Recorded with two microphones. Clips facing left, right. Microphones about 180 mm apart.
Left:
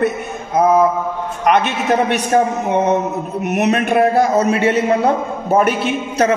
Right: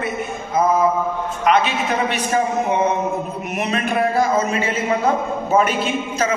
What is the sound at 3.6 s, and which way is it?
A man's voice, 65° left (ahead or behind).